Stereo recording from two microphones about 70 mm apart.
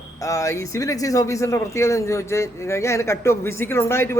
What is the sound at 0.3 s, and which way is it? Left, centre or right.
Speech, left.